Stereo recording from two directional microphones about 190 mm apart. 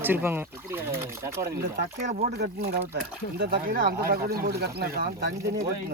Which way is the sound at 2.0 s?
35° right (ahead or behind).